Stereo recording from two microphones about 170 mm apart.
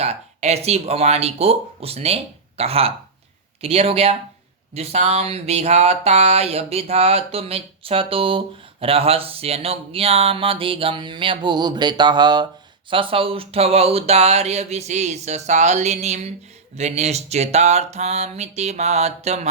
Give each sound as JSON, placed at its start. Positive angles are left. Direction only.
{"t": 0.0, "sound": "speech", "side_deg": -40}